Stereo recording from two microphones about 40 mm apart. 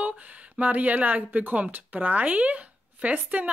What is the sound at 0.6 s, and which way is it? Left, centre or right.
Speech, right.